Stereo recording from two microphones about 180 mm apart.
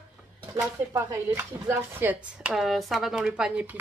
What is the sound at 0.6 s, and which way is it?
Speech, 15° right (ahead or behind).